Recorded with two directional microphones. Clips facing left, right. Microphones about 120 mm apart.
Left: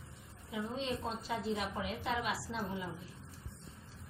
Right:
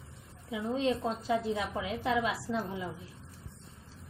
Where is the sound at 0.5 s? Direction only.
90° right.